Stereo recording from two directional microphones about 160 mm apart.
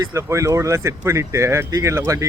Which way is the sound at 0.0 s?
20° right (ahead or behind).